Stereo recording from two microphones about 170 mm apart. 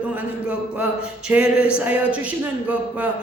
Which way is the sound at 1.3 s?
5° right (ahead or behind).